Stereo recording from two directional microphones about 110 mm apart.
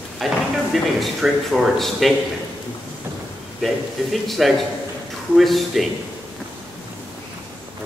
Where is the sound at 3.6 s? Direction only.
Centre (ahead or behind).